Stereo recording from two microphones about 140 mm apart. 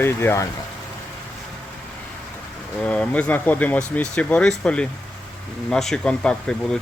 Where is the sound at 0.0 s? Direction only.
15° left (ahead or behind).